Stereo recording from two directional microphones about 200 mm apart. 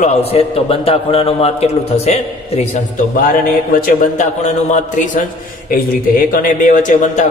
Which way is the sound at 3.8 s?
40° left (ahead or behind).